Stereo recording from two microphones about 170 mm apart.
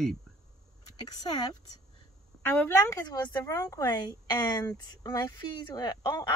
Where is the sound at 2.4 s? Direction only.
10° left (ahead or behind).